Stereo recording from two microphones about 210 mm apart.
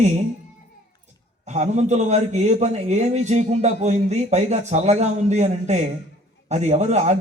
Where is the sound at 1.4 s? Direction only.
35° right (ahead or behind).